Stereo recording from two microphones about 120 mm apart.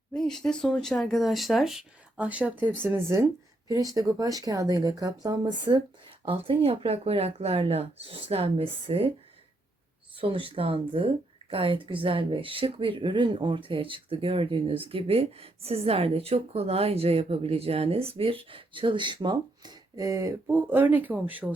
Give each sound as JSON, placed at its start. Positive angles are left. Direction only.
{"t": 0.1, "sound": "speech", "side_deg": 5}
{"t": 10.2, "sound": "speech", "side_deg": -50}
{"t": 20.5, "sound": "speech", "side_deg": -15}